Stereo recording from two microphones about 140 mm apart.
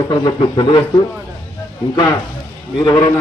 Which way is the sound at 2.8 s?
30° left (ahead or behind).